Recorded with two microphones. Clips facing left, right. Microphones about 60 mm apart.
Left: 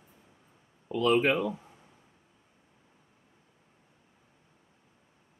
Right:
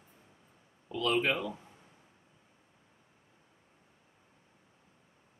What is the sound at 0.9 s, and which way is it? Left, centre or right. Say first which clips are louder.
Speech: left 5 dB; left.